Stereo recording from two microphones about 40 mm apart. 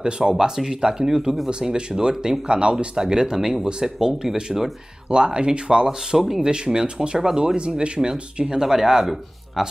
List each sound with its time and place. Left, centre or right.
0.0 s speech: centre
1.5 s speech: right
3.3 s speech: centre
5.1 s speech: right
6.1 s speech: centre
6.4 s speech: centre
8.5 s speech: centre